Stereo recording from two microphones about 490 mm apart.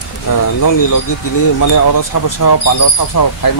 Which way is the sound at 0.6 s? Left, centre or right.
Left.